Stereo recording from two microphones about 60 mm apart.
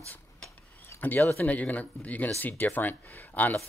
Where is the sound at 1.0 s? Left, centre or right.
Left.